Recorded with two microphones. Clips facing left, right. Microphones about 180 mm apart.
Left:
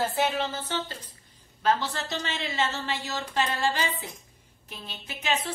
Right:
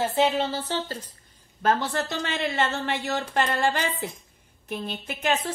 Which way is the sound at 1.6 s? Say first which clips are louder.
Right 2 dB; 50° right (ahead or behind).